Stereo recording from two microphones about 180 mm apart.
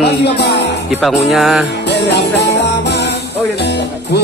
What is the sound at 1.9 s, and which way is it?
Music, 70° left (ahead or behind).